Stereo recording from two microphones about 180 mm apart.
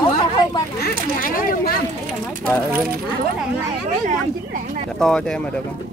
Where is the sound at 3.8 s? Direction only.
45° right (ahead or behind).